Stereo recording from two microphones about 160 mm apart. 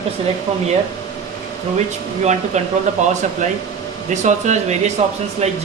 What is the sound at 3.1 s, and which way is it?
Speech, 45° right (ahead or behind).